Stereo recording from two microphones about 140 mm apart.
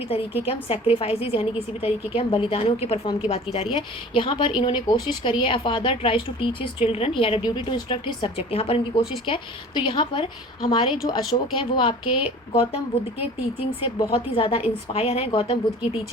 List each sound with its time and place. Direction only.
0.4 s a woman's voice: 45° left (ahead or behind)
14.1 s a woman's voice: 40° left (ahead or behind)